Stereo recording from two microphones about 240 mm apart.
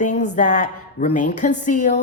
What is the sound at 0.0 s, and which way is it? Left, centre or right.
Music, left.